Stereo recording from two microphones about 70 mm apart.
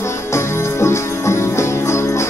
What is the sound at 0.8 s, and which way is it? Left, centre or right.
Music, left.